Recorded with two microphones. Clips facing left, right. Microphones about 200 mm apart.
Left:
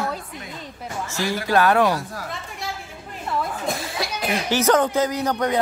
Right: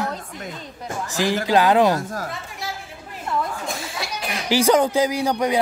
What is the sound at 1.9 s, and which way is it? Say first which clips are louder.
Speech: right 3 dB; 45° right (ahead or behind).